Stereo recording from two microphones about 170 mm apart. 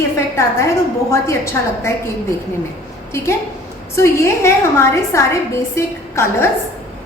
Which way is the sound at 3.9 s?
15° left (ahead or behind).